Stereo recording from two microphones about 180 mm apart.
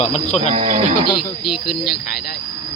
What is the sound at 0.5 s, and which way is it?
Speech, 45° right (ahead or behind).